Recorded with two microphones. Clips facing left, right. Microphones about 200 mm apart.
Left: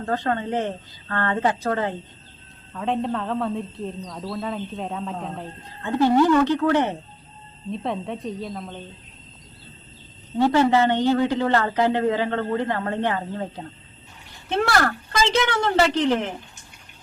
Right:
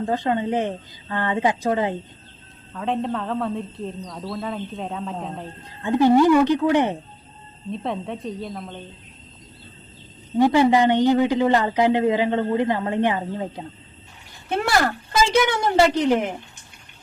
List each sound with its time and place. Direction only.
0.0 s a man's voice: 15° right (ahead or behind)
2.7 s a woman's voice: centre (ahead or behind)
5.8 s a man's voice: 15° right (ahead or behind)
7.7 s a woman's voice: centre (ahead or behind)
10.3 s a man's voice: 15° right (ahead or behind)
14.7 s a man's voice: 15° right (ahead or behind)